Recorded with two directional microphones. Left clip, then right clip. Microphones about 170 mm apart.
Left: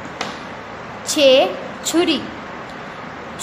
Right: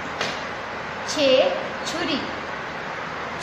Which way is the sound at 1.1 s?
70° left (ahead or behind).